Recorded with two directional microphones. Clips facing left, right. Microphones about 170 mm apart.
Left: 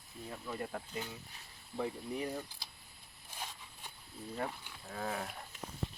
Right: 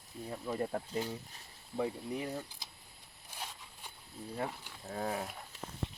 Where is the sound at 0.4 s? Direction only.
25° right (ahead or behind).